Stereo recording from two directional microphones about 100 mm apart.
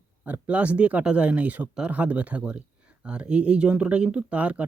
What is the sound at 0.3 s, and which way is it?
Speech, 15° right (ahead or behind).